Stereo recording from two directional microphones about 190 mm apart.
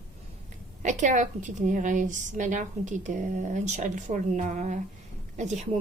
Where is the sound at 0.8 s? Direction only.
40° right (ahead or behind).